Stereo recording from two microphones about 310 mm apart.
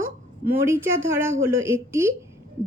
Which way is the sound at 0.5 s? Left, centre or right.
Centre.